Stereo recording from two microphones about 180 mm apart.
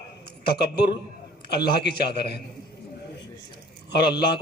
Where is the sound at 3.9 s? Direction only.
65° left (ahead or behind).